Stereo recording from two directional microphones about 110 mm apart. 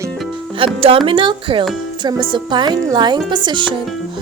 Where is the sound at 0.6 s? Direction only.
55° right (ahead or behind).